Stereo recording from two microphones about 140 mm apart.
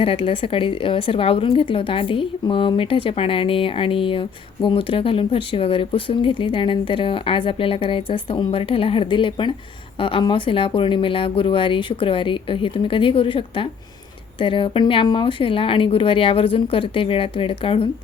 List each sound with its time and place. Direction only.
0.0 s a woman's voice: 40° left (ahead or behind)